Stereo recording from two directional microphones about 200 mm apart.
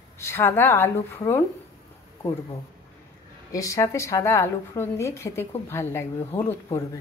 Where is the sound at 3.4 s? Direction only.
15° left (ahead or behind).